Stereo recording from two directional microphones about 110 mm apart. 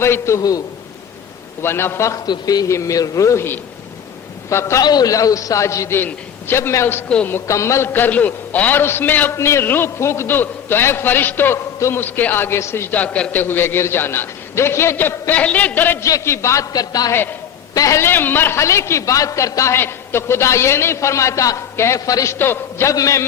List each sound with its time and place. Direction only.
0.0 s a man's voice: 25° left (ahead or behind)
1.6 s a man's voice: 20° left (ahead or behind)
16.0 s a man's voice: 25° left (ahead or behind)